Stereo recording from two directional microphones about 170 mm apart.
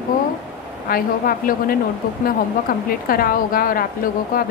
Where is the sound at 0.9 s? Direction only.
60° left (ahead or behind).